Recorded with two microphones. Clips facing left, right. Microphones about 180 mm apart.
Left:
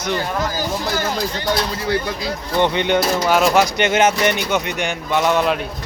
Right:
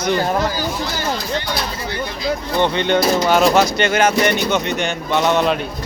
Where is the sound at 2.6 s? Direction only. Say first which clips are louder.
Even; 15° left (ahead or behind).